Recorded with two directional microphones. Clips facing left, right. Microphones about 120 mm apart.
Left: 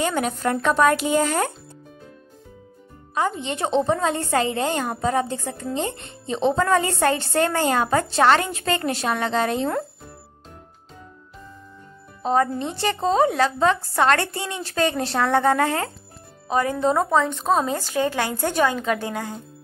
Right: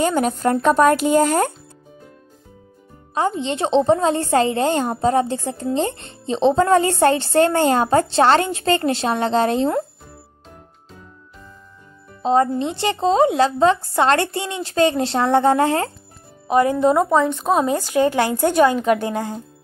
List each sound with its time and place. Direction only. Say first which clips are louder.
0.0 s speech: right 4 dB; 40° right (ahead or behind)
3.2 s speech: right 3 dB; 30° right (ahead or behind)
12.2 s speech: right 4 dB; 25° right (ahead or behind)
16.8 s speech: right 4 dB; 10° right (ahead or behind)
17.6 s speech: right 5 dB; 25° right (ahead or behind)